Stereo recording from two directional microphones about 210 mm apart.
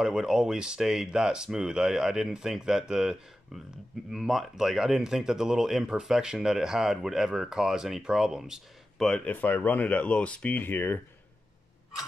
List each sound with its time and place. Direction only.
0.0 s speech: 5° right (ahead or behind)